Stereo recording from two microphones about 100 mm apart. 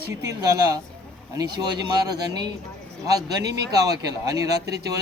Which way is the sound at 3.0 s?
35° right (ahead or behind).